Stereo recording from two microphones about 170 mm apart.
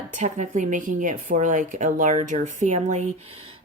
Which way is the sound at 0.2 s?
45° right (ahead or behind).